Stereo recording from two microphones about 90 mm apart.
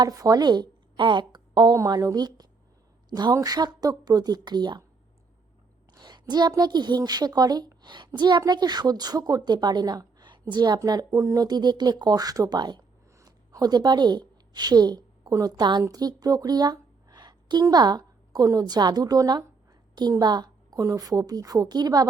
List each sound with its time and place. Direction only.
0.0 s a woman's voice: 45° right (ahead or behind); by 1.7 s 60° right (ahead or behind)
1.7 s a woman's voice: 40° right (ahead or behind); by 4.8 s 55° right (ahead or behind)
5.9 s a sound: 50° right (ahead or behind)
6.6 s a woman's voice: 50° right (ahead or behind)
10.8 s speech: 40° right (ahead or behind)
13.1 s a sound: 40° right (ahead or behind)
15.3 s a woman's voice: 35° right (ahead or behind)
15.5 s a woman's voice: 55° right (ahead or behind)
20.7 s speech: 35° right (ahead or behind)